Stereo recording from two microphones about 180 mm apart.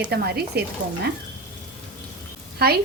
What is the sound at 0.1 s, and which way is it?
Speech, 60° right (ahead or behind).